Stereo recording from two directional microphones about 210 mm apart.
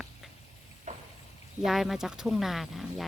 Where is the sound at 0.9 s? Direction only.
35° right (ahead or behind).